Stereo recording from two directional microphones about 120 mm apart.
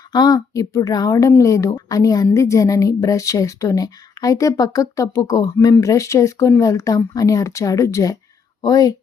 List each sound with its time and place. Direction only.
0.1 s speech: 35° left (ahead or behind)